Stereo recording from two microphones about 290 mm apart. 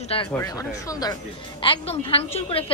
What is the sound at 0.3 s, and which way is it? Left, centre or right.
A man's voice, centre.